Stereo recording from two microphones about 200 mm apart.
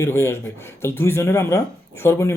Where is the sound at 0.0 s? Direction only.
10° left (ahead or behind).